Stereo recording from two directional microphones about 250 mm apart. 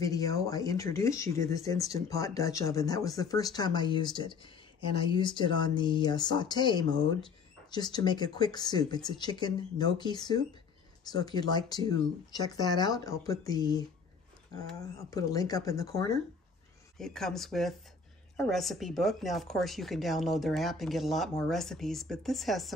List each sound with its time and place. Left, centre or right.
0.0 s speech: centre
15.0 s speech: centre
17.0 s speech: centre